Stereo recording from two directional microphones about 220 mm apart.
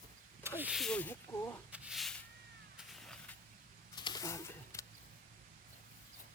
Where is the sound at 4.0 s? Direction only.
20° left (ahead or behind).